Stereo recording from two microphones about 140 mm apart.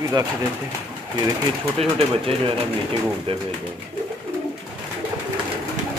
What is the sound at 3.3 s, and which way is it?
Speech, 40° right (ahead or behind).